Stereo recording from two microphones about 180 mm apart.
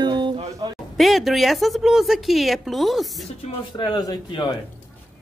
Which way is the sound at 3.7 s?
25° left (ahead or behind).